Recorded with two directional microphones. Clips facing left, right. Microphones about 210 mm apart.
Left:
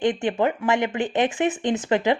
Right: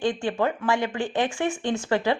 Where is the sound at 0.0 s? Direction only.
20° left (ahead or behind).